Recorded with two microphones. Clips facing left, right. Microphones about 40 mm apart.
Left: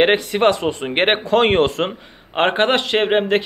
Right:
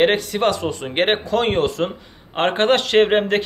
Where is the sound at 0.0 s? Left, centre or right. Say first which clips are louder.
Left 2 dB; left.